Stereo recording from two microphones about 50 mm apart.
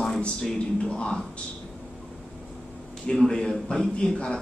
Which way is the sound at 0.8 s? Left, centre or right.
Centre.